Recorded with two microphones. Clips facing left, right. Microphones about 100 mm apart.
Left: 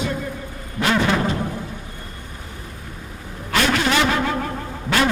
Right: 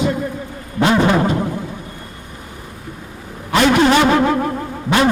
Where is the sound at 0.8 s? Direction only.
25° right (ahead or behind).